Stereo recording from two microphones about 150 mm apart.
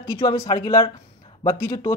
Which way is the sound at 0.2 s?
30° left (ahead or behind).